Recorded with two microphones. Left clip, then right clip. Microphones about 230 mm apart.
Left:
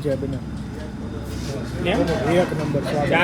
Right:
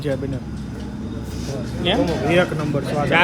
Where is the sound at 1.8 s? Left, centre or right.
Right.